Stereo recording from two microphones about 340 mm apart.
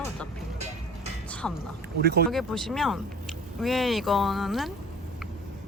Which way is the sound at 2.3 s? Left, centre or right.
Centre.